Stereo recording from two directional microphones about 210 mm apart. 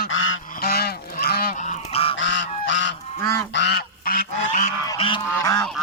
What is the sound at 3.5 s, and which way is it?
Goose, 55° left (ahead or behind).